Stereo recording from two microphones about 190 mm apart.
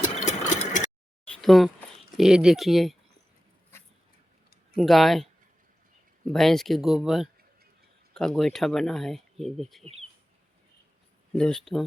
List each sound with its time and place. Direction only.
0.3 s a sound: 40° left (ahead or behind)
1.4 s speech: centre (ahead or behind)
4.8 s speech: centre (ahead or behind)
11.3 s speech: 5° left (ahead or behind)